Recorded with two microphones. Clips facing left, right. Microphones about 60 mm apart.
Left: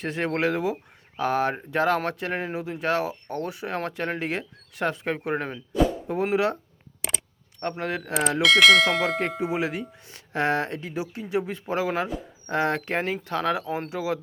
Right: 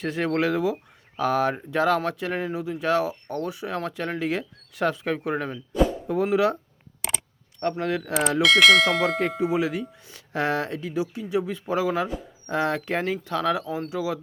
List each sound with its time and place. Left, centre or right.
0.0 s speech: left
7.6 s speech: centre
8.4 s speech: centre
9.6 s speech: left
13.9 s speech: left